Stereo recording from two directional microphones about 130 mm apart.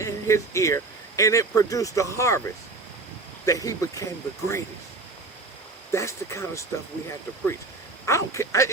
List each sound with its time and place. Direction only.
0.0 s speech: 20° left (ahead or behind)
5.9 s speech: 20° left (ahead or behind)
8.0 s speech: 20° left (ahead or behind)